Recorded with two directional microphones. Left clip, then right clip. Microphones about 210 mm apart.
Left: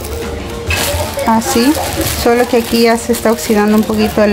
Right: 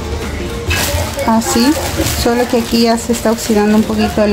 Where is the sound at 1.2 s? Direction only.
15° left (ahead or behind).